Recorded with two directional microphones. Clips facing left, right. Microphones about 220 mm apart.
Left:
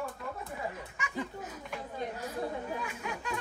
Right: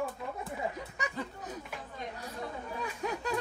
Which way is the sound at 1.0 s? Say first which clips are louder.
Right 5 dB; 35° right (ahead or behind).